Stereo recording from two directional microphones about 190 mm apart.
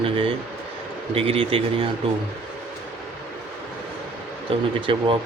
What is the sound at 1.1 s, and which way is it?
Speech, 30° right (ahead or behind).